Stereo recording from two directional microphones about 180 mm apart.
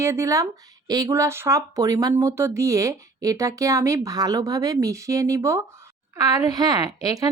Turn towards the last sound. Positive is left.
turn(degrees=-20)  # may be behind; listen again after turning